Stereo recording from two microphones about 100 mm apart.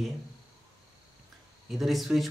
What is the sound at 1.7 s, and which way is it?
Speech, centre (ahead or behind).